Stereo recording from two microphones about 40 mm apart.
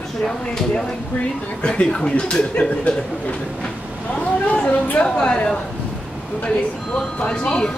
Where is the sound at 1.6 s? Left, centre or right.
Left.